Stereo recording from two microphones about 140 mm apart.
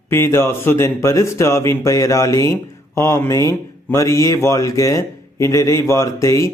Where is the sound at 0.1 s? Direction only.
20° left (ahead or behind).